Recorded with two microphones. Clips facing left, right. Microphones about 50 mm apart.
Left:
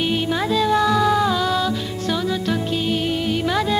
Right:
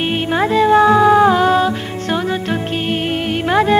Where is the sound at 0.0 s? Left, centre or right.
Right.